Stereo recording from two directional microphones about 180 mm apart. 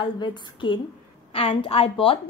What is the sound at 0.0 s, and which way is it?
A woman's voice, 25° left (ahead or behind).